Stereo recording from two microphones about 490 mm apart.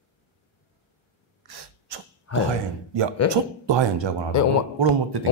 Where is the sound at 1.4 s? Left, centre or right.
Right.